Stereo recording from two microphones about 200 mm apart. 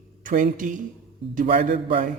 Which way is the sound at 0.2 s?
40° right (ahead or behind).